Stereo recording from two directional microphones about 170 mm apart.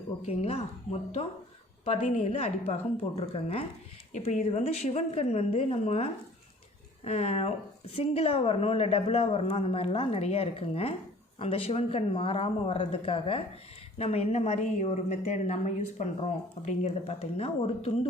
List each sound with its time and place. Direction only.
0.2 s speech: 40° left (ahead or behind)